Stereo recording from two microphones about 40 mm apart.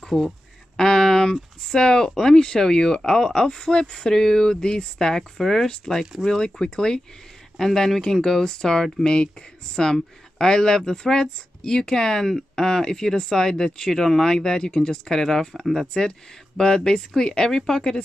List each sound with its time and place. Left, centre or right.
0.0 s speech: centre
0.7 s speech: centre
15.6 s speech: centre
15.9 s speech: centre